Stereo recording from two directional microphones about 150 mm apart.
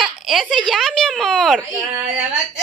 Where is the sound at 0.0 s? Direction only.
Centre (ahead or behind).